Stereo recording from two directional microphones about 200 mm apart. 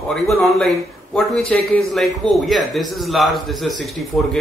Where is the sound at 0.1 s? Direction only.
Centre (ahead or behind).